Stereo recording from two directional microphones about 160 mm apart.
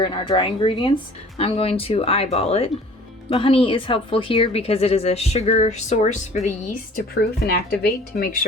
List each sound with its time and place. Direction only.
0.3 s speech: 30° left (ahead or behind); by 8.4 s 60° left (ahead or behind)